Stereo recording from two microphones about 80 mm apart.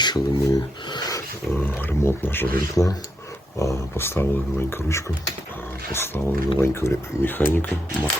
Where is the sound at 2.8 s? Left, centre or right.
Left.